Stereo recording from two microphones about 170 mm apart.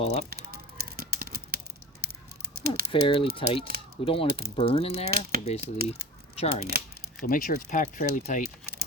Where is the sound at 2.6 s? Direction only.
65° right (ahead or behind).